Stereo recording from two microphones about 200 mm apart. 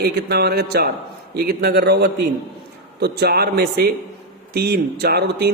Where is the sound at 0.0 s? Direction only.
55° right (ahead or behind).